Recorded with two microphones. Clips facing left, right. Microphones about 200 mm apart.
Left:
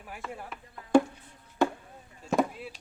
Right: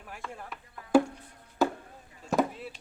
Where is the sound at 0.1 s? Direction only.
5° left (ahead or behind).